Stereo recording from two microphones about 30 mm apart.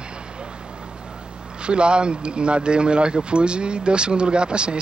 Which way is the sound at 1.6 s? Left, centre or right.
Right.